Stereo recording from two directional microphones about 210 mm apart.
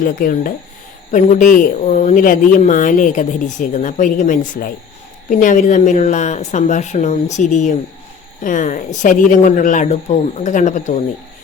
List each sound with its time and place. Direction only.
0.0 s speech: 40° left (ahead or behind)